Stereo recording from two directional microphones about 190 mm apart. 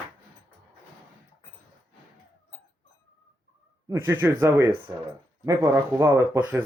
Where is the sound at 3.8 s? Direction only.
15° right (ahead or behind).